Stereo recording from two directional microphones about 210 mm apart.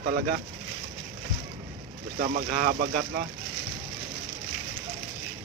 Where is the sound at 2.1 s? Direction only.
40° right (ahead or behind).